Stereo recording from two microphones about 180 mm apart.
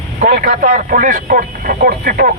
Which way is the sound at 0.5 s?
50° right (ahead or behind).